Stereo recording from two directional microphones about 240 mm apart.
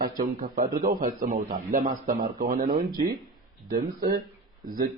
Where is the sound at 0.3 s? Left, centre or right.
Right.